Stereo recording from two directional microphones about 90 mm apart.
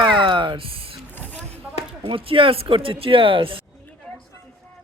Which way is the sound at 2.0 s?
75° right (ahead or behind).